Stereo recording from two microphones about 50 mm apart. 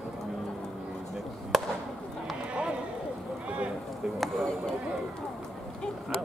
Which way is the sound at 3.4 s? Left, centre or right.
Right.